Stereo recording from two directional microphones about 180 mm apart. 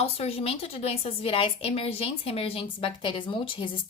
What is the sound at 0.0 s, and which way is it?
A woman's voice, 35° left (ahead or behind).